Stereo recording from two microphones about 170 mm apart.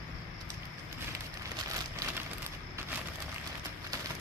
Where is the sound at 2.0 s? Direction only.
20° right (ahead or behind).